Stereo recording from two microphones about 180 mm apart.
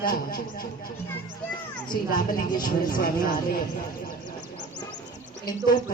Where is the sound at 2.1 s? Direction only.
50° left (ahead or behind).